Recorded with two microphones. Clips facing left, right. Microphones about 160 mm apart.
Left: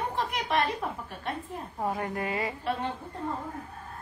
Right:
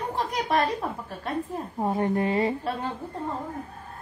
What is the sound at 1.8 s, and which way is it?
Speech, 25° right (ahead or behind).